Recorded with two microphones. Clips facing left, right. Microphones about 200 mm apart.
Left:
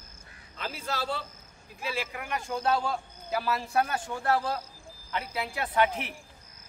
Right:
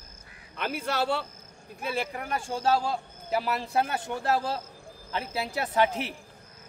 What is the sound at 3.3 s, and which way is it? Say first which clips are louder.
Speech: right 2 dB; 20° right (ahead or behind).